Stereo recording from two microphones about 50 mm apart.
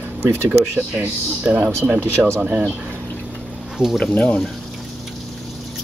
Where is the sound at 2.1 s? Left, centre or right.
Right.